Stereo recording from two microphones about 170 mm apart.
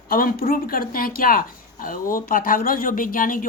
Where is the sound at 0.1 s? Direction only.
60° left (ahead or behind).